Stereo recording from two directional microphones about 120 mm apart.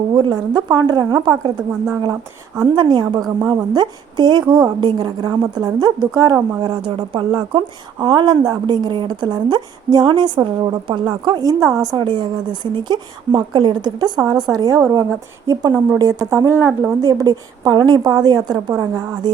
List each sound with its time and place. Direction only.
0.1 s a woman's voice: 35° right (ahead or behind)